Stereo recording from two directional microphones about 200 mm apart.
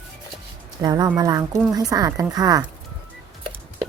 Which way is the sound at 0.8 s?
20° right (ahead or behind).